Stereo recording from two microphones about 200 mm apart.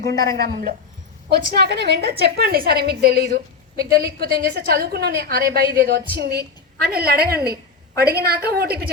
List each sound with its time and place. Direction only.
0.0 s a woman's voice: 55° right (ahead or behind)